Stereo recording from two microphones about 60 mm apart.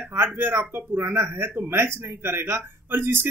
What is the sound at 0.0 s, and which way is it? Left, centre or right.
Speech, right.